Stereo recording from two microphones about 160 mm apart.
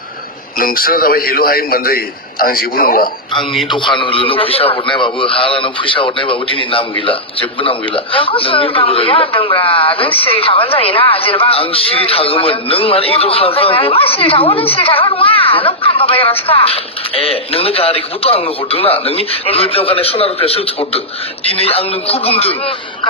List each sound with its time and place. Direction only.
0.6 s a man's voice: 65° left (ahead or behind)
3.7 s a man's voice: 30° left (ahead or behind)